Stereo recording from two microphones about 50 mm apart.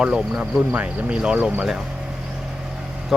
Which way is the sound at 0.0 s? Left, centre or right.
Centre.